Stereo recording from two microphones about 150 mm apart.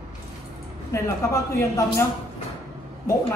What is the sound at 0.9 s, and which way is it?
Speech, 20° left (ahead or behind).